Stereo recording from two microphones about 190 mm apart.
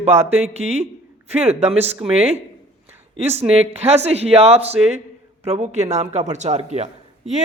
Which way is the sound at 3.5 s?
35° right (ahead or behind).